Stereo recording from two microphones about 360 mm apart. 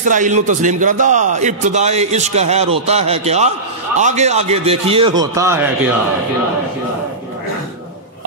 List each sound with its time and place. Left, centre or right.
0.0 s a man's voice: right